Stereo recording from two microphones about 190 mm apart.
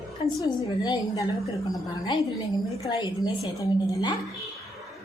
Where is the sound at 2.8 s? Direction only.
20° left (ahead or behind).